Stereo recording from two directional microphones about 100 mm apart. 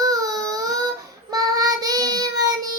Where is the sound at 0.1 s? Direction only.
35° right (ahead or behind).